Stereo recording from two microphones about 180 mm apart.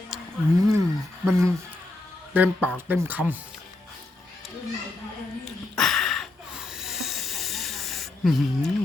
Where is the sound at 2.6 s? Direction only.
10° right (ahead or behind).